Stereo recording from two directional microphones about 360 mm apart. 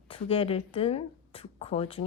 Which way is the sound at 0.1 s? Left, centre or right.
Centre.